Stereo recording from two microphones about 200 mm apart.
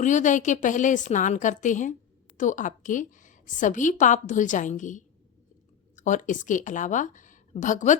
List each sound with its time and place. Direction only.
0.0 s a woman's voice: 40° left (ahead or behind)